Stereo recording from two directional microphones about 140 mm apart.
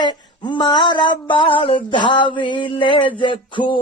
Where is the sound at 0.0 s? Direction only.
35° left (ahead or behind).